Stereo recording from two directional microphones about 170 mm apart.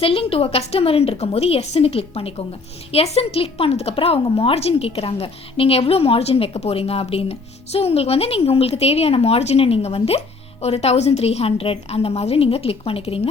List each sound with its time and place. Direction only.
0.0 s a woman's voice: 35° left (ahead or behind)